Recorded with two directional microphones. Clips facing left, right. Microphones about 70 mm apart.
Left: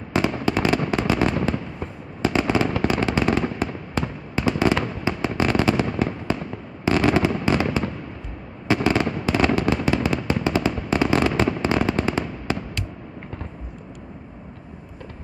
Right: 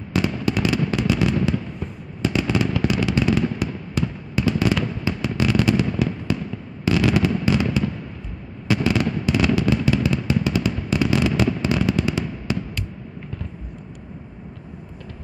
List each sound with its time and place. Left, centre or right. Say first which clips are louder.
0.1 s fireworks: left 1 dB; left